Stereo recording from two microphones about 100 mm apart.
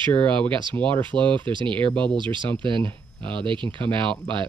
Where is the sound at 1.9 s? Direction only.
10° left (ahead or behind).